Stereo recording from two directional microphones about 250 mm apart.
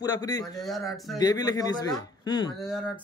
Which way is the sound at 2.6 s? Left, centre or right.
Centre.